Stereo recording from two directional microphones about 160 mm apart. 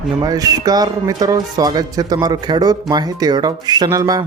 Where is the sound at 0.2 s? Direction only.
25° right (ahead or behind).